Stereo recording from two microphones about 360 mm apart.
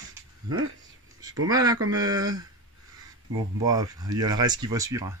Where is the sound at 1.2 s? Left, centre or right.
Right.